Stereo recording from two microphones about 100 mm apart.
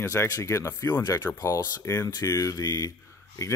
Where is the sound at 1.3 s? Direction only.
35° left (ahead or behind).